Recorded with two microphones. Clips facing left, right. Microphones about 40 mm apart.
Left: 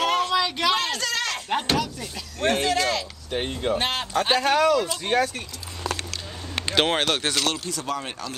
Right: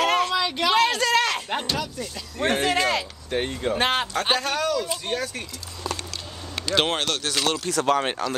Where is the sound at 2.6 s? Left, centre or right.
Right.